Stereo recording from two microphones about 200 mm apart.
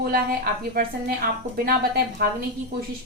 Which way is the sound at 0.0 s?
50° right (ahead or behind).